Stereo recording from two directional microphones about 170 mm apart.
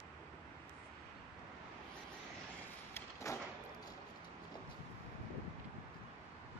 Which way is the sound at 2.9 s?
20° left (ahead or behind).